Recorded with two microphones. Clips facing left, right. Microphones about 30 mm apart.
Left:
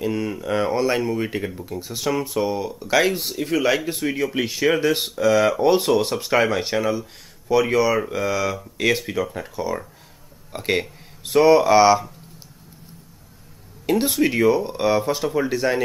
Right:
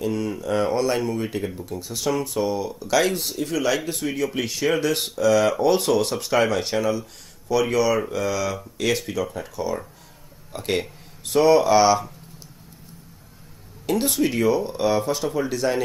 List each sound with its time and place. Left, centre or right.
0.0 s speech: centre
1.5 s speech: centre
1.8 s speech: centre
13.8 s speech: centre